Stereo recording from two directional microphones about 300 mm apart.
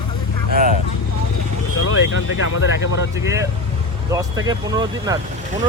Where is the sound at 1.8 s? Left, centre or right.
Left.